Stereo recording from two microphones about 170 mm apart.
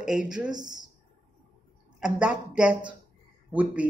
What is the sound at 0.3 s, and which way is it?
Speech, 5° right (ahead or behind).